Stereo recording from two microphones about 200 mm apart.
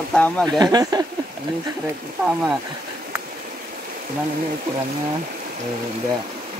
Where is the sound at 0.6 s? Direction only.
20° right (ahead or behind).